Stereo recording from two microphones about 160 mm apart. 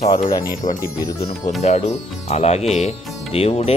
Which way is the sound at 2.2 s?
40° left (ahead or behind).